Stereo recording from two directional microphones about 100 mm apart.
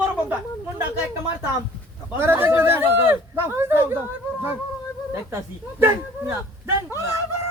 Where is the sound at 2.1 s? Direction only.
25° right (ahead or behind).